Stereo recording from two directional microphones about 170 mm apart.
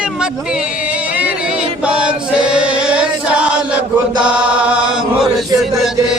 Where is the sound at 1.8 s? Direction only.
5° right (ahead or behind).